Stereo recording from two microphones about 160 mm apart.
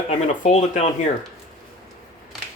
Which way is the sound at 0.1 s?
45° left (ahead or behind).